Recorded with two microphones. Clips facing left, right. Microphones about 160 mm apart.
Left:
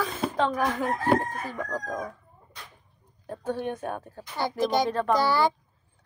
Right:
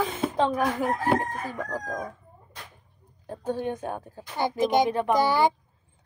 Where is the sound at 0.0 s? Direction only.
20° right (ahead or behind).